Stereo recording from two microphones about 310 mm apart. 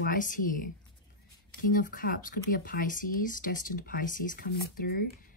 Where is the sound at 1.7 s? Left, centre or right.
Left.